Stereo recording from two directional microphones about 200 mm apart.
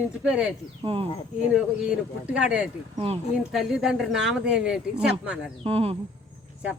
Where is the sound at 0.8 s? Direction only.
30° right (ahead or behind).